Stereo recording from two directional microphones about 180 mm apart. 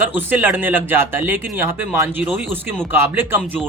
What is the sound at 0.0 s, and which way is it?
A man's voice, 10° right (ahead or behind).